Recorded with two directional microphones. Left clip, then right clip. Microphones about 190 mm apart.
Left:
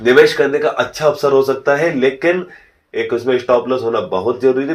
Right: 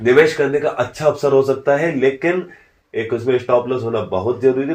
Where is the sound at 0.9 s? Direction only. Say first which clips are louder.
Left 1 dB; 25° left (ahead or behind).